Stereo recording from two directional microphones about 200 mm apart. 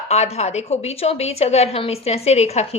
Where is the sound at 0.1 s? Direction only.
35° left (ahead or behind).